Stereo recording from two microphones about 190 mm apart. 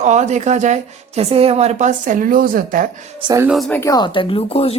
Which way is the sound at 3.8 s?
20° left (ahead or behind).